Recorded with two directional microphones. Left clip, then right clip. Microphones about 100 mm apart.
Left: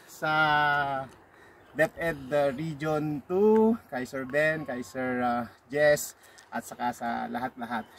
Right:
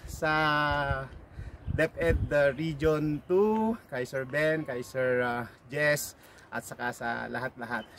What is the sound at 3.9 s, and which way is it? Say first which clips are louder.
Speech: left 1 dB; 35° right (ahead or behind).